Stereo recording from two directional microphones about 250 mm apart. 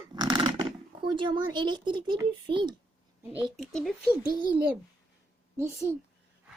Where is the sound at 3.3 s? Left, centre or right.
Centre.